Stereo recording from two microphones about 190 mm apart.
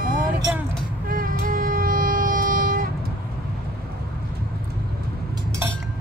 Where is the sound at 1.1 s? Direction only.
50° right (ahead or behind).